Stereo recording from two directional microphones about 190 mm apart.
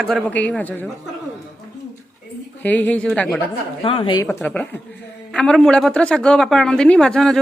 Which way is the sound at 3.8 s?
25° left (ahead or behind).